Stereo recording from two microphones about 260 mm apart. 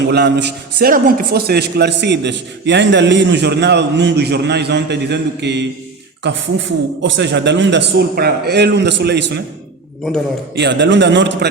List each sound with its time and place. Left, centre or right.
0.0 s a man's voice: right
10.5 s a man's voice: right